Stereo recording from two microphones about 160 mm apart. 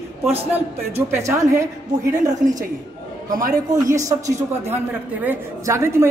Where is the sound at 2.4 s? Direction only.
55° right (ahead or behind).